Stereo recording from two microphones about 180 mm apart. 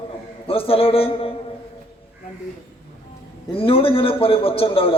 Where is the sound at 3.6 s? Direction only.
30° left (ahead or behind).